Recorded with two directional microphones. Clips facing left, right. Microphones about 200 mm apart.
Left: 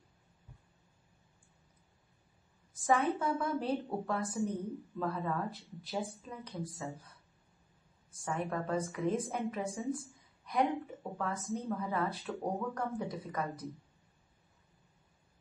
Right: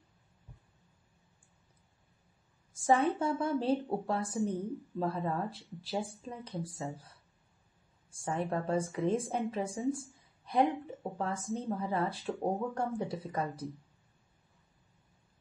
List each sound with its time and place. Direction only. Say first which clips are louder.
2.8 s speech: right 3 dB; 30° right (ahead or behind)
8.1 s speech: right 3 dB; 30° right (ahead or behind)